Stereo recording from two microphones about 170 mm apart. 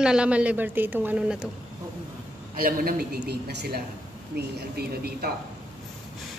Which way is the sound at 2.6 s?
55° right (ahead or behind).